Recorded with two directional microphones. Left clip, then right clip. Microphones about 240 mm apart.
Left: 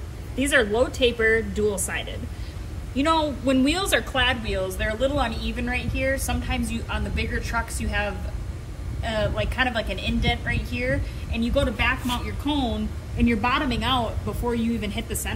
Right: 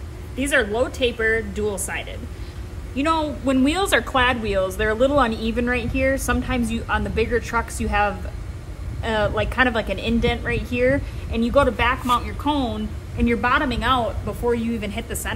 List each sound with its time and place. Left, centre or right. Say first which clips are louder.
0.4 s a woman's voice: even; centre; by 7.6 s right
9.0 s a woman's voice: right 4 dB; right; by 15.3 s centre